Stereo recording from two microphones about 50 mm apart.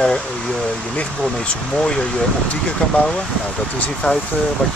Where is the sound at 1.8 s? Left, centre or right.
Centre.